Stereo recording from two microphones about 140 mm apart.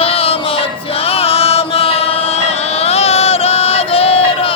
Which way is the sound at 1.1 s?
45° left (ahead or behind).